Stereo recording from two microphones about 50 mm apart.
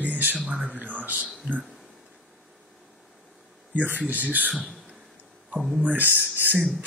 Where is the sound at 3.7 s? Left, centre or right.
Right.